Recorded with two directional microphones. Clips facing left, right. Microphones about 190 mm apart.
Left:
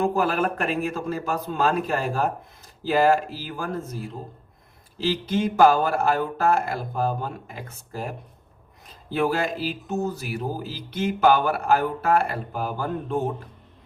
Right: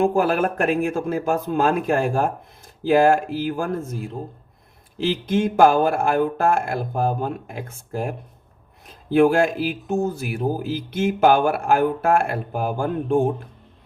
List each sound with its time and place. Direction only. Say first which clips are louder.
0.0 s speech: right 4 dB; 50° right (ahead or behind)
5.1 s speech: right 2 dB; 50° right (ahead or behind)
9.1 s speech: right 8 dB; 50° right (ahead or behind)